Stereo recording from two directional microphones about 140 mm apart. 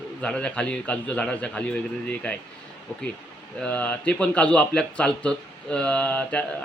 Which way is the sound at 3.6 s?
10° left (ahead or behind).